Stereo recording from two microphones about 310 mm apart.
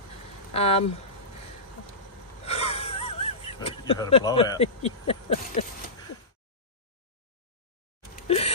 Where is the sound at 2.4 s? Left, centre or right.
Centre.